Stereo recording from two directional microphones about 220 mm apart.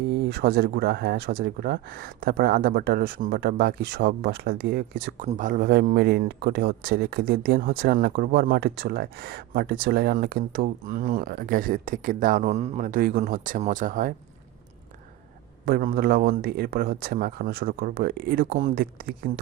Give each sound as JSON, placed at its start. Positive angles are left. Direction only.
{"t": 0.3, "sound": "a man's voice", "side_deg": -45}
{"t": 15.6, "sound": "a man's voice", "side_deg": -40}